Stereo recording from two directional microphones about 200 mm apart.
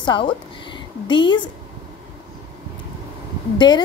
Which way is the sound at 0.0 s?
25° left (ahead or behind).